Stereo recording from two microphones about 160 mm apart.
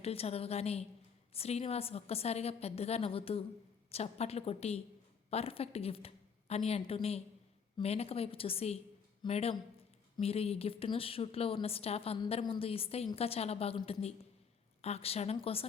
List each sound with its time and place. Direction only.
0.0 s a woman's voice: 40° left (ahead or behind)